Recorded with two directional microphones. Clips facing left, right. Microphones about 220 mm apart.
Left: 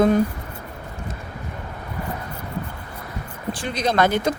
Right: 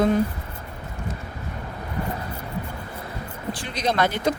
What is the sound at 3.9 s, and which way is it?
Speech, 45° left (ahead or behind).